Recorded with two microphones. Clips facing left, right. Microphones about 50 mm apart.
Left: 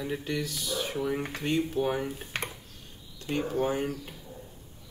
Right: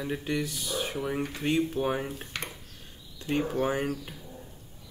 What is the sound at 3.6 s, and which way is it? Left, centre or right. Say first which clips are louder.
Speech: right 1 dB; right.